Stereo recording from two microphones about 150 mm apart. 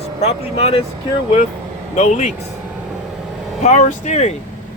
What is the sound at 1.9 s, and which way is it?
Speech, 50° left (ahead or behind).